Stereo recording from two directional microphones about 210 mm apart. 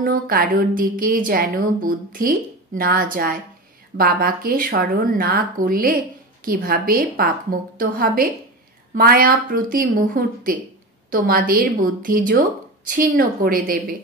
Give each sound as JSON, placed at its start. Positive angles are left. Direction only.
{"t": 0.0, "sound": "a woman's voice", "side_deg": -45}